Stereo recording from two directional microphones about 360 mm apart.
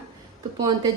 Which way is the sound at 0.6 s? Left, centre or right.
Centre.